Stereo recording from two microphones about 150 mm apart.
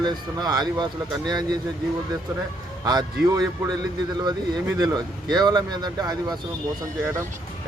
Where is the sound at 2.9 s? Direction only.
25° right (ahead or behind).